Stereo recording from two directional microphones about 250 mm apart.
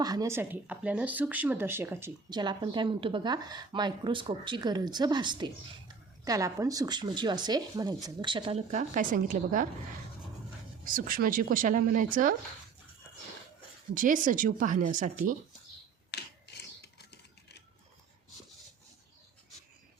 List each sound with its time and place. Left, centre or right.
0.0 s a woman's voice: centre; by 9.6 s right
10.8 s speech: right
13.9 s speech: right
16.1 s mechanisms: left